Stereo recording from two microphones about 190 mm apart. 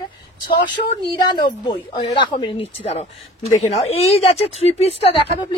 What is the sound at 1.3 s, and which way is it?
Speech, 25° left (ahead or behind).